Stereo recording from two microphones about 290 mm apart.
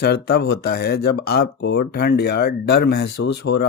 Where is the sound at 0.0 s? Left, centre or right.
Left.